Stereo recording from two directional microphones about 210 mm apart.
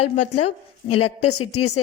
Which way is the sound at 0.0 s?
90° left.